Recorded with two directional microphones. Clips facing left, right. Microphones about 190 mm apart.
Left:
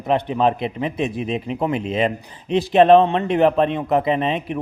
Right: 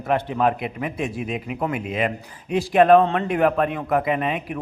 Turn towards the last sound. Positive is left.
turn(degrees=25)  # may be behind; listen again after turning